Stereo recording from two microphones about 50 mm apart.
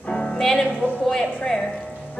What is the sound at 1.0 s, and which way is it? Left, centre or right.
Speech, centre.